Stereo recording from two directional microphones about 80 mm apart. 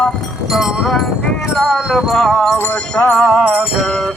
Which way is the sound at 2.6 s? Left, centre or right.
Left.